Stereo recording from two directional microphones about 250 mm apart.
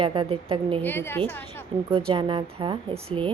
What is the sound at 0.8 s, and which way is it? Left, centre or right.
Speech, centre.